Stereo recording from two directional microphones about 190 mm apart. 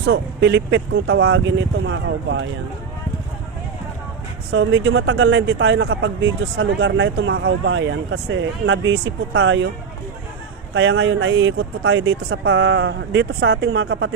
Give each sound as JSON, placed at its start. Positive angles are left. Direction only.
{"t": 0.1, "sound": "speech", "side_deg": -65}
{"t": 4.5, "sound": "speech", "side_deg": -90}
{"t": 10.8, "sound": "speech", "side_deg": -90}